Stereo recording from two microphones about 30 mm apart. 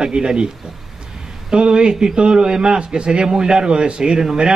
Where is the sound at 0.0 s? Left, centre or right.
Right.